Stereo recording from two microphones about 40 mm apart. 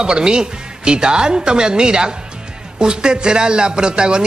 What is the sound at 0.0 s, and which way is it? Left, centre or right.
Speech, right.